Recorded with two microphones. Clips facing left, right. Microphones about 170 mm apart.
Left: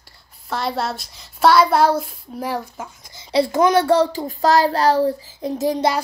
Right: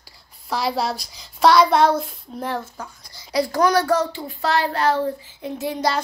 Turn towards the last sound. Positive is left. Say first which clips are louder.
# left 6 dB
turn(degrees=40)  # may be behind; listen again after turning